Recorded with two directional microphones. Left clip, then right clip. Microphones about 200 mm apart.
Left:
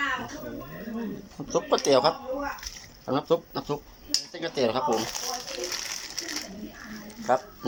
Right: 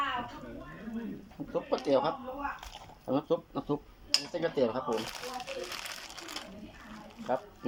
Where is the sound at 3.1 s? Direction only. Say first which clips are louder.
Left 6 dB; 10° right (ahead or behind).